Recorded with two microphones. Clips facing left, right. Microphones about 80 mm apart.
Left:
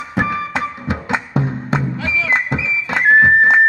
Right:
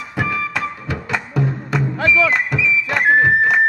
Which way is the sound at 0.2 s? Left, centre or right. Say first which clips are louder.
Left 2 dB; left.